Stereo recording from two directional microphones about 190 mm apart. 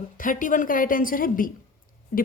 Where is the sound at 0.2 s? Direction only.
45° left (ahead or behind).